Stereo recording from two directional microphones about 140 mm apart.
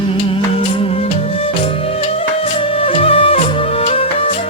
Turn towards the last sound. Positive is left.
turn(degrees=45)  # may be behind; listen again after turning